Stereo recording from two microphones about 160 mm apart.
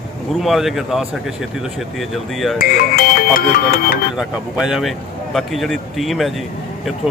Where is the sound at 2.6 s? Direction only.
65° left (ahead or behind).